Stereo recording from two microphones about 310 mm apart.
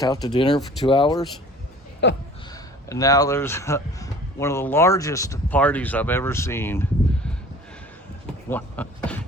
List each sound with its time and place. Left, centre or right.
0.0 s speech: centre
2.0 s speech: left
2.5 s speech: centre
8.4 s speech: centre